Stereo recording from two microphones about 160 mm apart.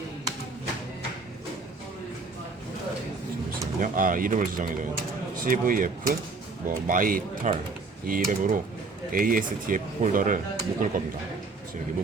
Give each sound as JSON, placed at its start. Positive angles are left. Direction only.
{"t": 3.8, "sound": "speech", "side_deg": -55}